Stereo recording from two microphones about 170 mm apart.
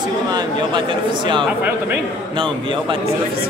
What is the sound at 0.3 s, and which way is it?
Speech, 30° right (ahead or behind).